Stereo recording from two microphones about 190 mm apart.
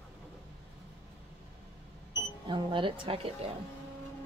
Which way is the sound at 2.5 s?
25° right (ahead or behind).